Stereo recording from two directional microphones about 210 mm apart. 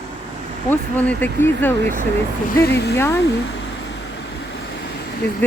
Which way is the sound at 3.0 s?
10° left (ahead or behind).